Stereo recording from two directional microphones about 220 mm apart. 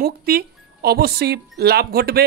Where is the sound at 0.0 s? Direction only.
45° right (ahead or behind).